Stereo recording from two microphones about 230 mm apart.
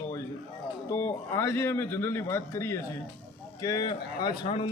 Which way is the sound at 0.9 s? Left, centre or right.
Centre.